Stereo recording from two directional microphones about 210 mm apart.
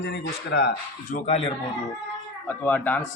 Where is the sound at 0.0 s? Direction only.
55° left (ahead or behind).